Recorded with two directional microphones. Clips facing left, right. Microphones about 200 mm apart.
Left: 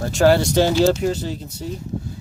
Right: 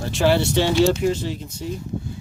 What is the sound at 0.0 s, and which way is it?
Speech, 45° left (ahead or behind).